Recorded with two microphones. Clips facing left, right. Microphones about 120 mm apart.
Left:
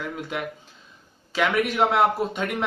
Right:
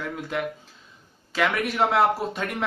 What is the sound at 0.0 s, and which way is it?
Speech, 5° left (ahead or behind).